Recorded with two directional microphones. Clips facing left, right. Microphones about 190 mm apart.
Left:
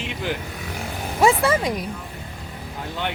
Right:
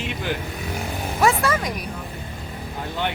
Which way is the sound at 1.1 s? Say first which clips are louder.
Left 3 dB; 25° left (ahead or behind).